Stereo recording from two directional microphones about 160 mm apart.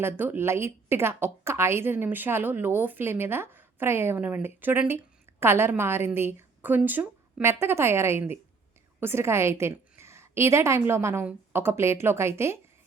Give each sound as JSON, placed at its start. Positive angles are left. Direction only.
{"t": 0.0, "sound": "a woman's voice", "side_deg": -15}